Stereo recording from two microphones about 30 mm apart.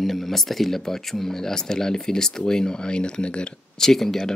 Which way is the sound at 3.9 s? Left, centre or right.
Centre.